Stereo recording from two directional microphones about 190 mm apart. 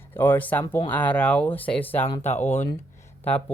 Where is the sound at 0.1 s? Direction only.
10° left (ahead or behind).